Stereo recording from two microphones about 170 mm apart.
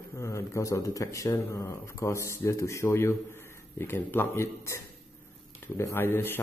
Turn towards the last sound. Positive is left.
turn(degrees=15)  # may be behind; listen again after turning